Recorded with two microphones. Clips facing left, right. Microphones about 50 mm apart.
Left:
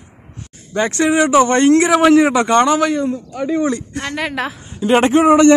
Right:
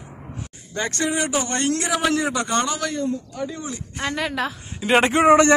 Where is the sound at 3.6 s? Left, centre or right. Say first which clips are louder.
Left 14 dB; left.